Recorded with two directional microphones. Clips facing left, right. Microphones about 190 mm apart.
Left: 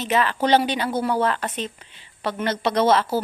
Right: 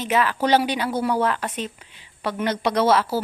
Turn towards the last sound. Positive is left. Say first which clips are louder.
# even
turn(degrees=-10)  # may be behind; listen again after turning